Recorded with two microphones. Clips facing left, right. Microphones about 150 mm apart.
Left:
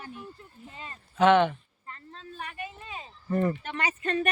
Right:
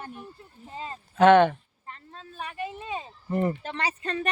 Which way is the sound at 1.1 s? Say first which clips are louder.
Right 4 dB; 55° right (ahead or behind).